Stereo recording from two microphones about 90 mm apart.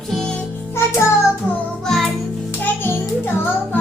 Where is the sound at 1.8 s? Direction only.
5° left (ahead or behind).